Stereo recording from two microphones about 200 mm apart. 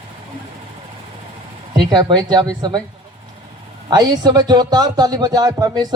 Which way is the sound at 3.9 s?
20° right (ahead or behind).